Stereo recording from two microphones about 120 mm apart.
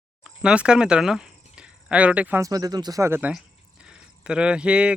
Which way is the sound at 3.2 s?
10° right (ahead or behind).